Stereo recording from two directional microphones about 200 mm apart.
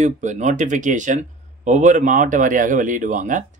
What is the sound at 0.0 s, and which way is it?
Speech, 35° right (ahead or behind).